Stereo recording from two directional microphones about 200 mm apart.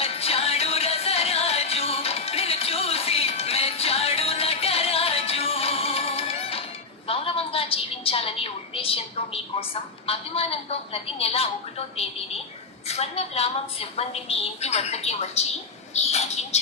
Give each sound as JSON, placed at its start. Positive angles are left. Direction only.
{"t": 0.0, "sound": "music", "side_deg": 30}
{"t": 7.1, "sound": "a sound", "side_deg": 30}
{"t": 12.9, "sound": "a woman's voice", "side_deg": 30}